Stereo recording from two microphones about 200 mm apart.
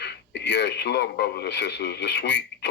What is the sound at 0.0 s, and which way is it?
Speech, 60° left (ahead or behind).